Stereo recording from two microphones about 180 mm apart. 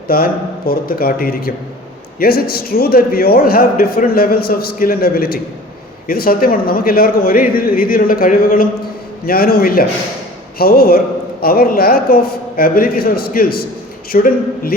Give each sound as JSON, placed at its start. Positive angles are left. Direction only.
{"t": 0.1, "sound": "a man's voice", "side_deg": 55}